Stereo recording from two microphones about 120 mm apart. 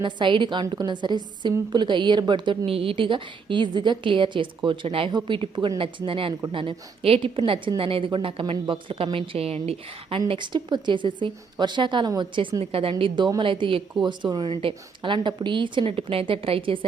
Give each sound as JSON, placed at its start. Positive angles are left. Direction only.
{"t": 0.0, "sound": "a woman's voice", "side_deg": -40}